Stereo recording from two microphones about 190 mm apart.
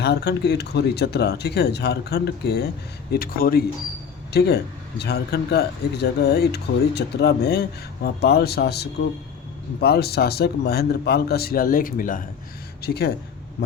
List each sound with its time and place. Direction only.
0.0 s speech: 60° left (ahead or behind)
12.8 s speech: 55° left (ahead or behind)